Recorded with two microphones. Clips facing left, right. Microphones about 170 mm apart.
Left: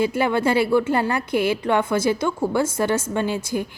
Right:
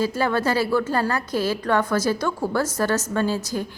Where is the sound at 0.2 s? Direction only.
25° left (ahead or behind).